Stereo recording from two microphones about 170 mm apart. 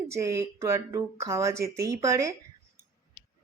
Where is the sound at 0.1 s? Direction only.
15° right (ahead or behind).